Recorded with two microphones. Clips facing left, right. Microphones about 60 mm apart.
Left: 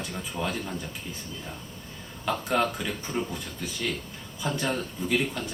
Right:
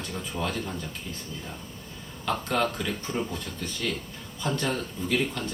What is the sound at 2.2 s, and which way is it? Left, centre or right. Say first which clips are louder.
A man's voice: left 1 dB; centre.